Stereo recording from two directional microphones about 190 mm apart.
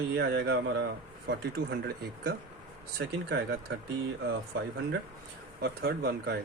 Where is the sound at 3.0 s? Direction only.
60° right (ahead or behind).